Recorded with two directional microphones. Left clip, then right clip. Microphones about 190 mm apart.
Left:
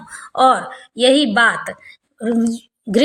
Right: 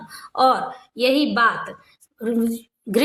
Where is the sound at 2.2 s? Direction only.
10° left (ahead or behind).